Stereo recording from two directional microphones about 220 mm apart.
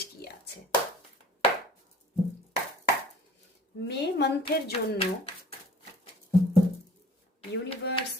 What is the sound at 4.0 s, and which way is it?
Speech, 50° left (ahead or behind).